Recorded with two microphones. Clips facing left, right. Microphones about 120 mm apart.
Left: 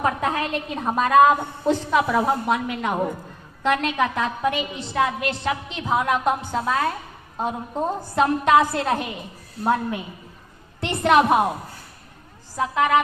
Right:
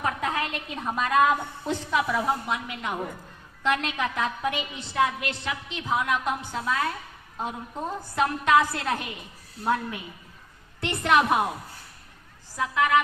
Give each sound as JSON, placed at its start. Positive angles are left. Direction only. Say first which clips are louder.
{"t": 0.3, "sound": "a woman's voice", "louder": "left 5 dB", "side_deg": 40}
{"t": 1.9, "sound": "a woman's voice", "louder": "left 3 dB", "side_deg": 45}
{"t": 12.5, "sound": "a woman's voice", "louder": "left 3 dB", "side_deg": 30}